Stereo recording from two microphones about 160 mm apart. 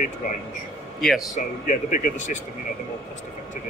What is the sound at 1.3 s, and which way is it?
Speech, 55° left (ahead or behind).